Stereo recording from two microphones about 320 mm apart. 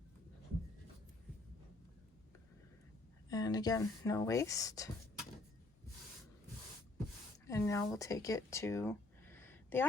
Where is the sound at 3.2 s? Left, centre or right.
Centre.